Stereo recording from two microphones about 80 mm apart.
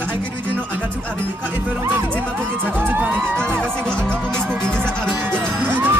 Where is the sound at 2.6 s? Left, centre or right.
Right.